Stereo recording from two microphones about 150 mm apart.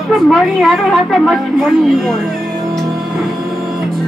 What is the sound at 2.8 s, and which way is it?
Music, centre (ahead or behind).